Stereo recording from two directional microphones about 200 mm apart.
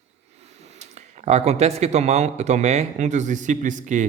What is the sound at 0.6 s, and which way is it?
A man's voice, 35° right (ahead or behind).